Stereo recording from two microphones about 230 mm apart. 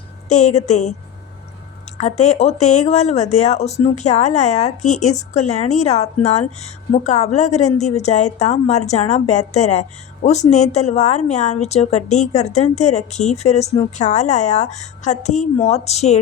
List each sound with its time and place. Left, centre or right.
0.3 s speech: left
2.0 s speech: left